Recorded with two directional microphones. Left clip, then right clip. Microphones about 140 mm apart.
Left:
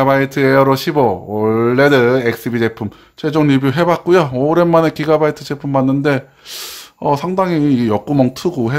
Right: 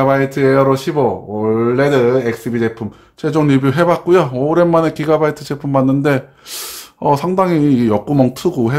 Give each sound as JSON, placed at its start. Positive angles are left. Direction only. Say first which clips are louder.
{"t": 0.0, "sound": "speech", "louder": "even", "side_deg": 30}
{"t": 3.2, "sound": "speech", "louder": "even", "side_deg": 20}